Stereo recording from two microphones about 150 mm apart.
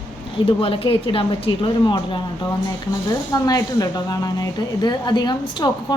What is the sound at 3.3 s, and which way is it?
A woman's voice, 25° left (ahead or behind).